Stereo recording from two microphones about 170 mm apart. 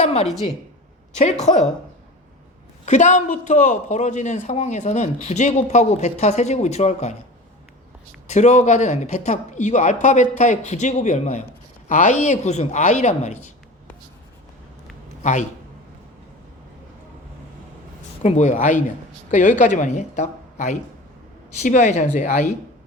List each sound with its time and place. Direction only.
0.0 s a woman's voice: 40° left (ahead or behind)
2.8 s a man's voice: 45° left (ahead or behind)
8.3 s a man's voice: 45° left (ahead or behind)
15.2 s a man's voice: 45° left (ahead or behind)
18.2 s a man's voice: 45° left (ahead or behind)